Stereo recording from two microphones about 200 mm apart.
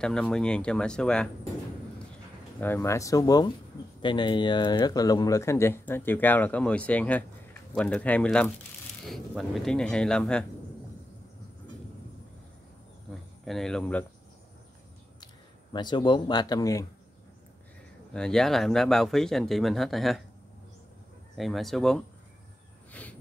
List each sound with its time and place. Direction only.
0.0 s speech: 5° left (ahead or behind)
2.6 s speech: 10° left (ahead or behind)
13.5 s speech: centre (ahead or behind)
15.7 s speech: 20° left (ahead or behind)
18.1 s speech: 5° left (ahead or behind)
21.4 s speech: centre (ahead or behind)
23.0 s a sound: 5° left (ahead or behind)